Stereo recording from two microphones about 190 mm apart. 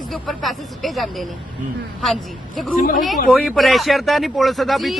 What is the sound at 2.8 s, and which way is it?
Speech, 45° left (ahead or behind).